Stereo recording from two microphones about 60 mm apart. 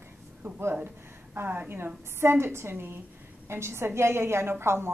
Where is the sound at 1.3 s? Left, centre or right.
Right.